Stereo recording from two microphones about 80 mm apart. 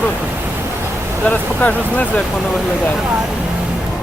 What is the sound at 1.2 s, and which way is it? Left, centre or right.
Speech, centre.